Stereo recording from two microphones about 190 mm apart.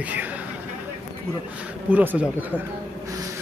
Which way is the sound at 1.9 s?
10° right (ahead or behind).